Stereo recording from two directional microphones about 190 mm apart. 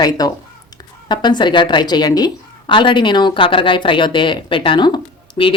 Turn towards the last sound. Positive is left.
turn(degrees=25)  # may be behind; listen again after turning